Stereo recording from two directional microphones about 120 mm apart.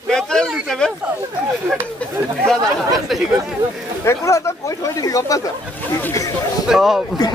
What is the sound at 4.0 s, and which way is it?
Speech, 25° left (ahead or behind).